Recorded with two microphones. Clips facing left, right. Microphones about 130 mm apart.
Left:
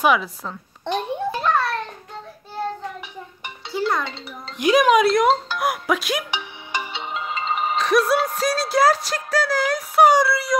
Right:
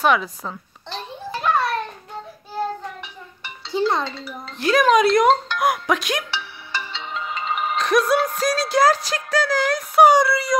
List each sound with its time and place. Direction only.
0.0 s speech: 5° left (ahead or behind)
0.8 s a sound: 55° left (ahead or behind)
1.4 s a sound: 15° right (ahead or behind)
3.7 s music: 25° right (ahead or behind)
4.1 s speech: 20° left (ahead or behind); by 6.2 s 5° left (ahead or behind)
6.3 s music: 15° left (ahead or behind)